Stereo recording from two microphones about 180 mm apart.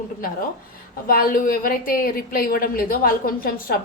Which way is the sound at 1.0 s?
50° left (ahead or behind).